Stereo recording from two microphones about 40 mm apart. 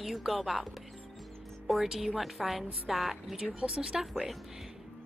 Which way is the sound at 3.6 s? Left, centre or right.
Centre.